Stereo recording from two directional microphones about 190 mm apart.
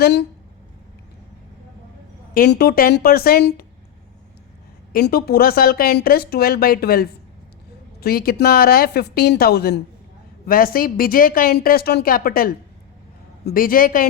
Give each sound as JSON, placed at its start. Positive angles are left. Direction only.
{"t": 0.0, "sound": "a woman's voice", "side_deg": 60}
{"t": 2.3, "sound": "speech", "side_deg": 55}
{"t": 4.9, "sound": "a woman's voice", "side_deg": 55}